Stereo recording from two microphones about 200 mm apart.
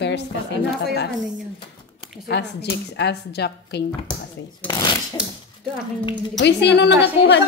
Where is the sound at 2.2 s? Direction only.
55° left (ahead or behind).